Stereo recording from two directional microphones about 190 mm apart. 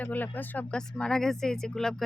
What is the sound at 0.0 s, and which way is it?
Speech, 10° left (ahead or behind).